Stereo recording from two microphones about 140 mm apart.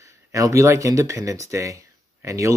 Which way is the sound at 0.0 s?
20° right (ahead or behind).